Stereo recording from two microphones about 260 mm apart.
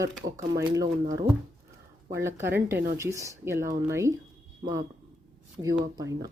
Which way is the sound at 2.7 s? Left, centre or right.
Right.